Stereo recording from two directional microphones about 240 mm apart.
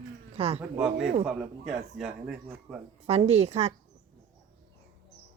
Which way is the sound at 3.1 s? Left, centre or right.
Right.